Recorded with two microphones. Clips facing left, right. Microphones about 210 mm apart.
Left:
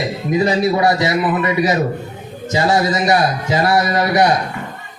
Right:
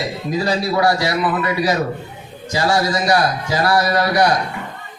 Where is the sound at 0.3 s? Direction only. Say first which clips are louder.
Left 4 dB; 20° left (ahead or behind).